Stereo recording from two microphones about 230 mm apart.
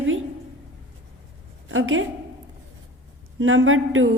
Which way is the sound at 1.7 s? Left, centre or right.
Right.